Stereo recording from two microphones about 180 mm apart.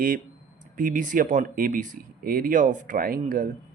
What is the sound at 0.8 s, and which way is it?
Speech, 45° right (ahead or behind).